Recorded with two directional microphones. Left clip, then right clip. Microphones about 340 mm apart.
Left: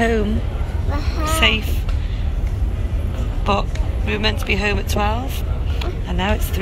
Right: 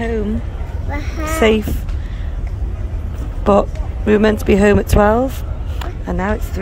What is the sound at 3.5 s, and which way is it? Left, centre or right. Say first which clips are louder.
Speech: right 7 dB; right.